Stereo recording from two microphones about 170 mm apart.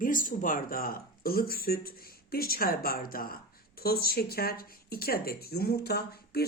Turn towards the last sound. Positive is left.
turn(degrees=70)  # may be behind; listen again after turning